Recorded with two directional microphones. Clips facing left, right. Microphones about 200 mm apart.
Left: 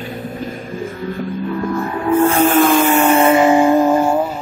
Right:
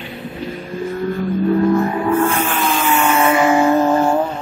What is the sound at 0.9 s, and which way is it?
Vehicle, 50° right (ahead or behind).